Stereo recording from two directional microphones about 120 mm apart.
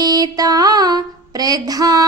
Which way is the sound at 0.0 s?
35° right (ahead or behind).